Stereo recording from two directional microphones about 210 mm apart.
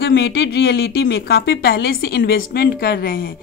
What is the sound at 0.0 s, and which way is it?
A woman's voice, 50° left (ahead or behind).